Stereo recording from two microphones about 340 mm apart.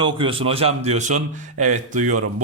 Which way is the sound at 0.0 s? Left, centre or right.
Centre.